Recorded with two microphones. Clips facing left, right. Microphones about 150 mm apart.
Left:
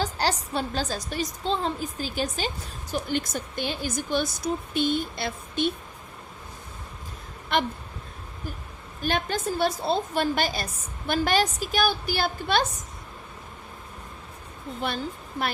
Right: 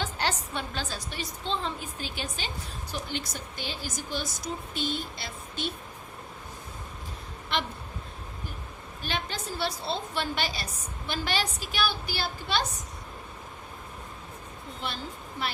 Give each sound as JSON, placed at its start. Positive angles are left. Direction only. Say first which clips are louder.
{"t": 0.0, "sound": "a woman's voice", "louder": "left 4 dB", "side_deg": 35}
{"t": 9.0, "sound": "a woman's voice", "louder": "left 7 dB", "side_deg": 50}
{"t": 14.8, "sound": "a woman's voice", "louder": "left 6 dB", "side_deg": 55}